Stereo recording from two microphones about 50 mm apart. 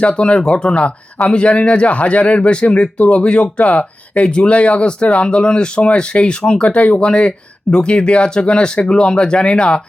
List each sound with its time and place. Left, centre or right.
0.0 s speech: left
7.0 s speech: centre